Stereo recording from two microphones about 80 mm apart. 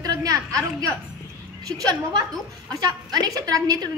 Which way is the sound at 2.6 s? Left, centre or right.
Right.